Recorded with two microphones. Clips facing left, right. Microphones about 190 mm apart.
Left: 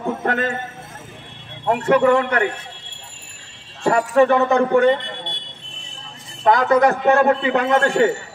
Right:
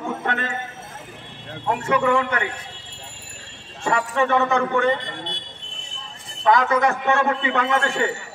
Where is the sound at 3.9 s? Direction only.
40° left (ahead or behind).